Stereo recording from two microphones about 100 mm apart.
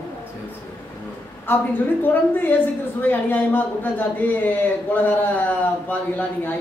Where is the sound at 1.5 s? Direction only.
20° left (ahead or behind).